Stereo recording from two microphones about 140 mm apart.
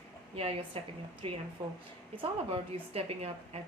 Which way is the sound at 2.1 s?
40° right (ahead or behind).